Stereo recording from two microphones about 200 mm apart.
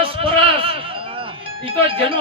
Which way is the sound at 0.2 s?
30° right (ahead or behind).